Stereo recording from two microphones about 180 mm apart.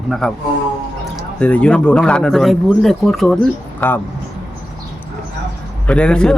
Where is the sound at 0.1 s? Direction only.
5° left (ahead or behind).